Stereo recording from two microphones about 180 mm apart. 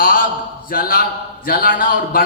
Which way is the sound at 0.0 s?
50° left (ahead or behind).